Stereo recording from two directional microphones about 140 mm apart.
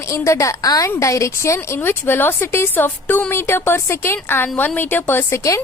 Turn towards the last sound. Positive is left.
turn(degrees=20)  # may be behind; listen again after turning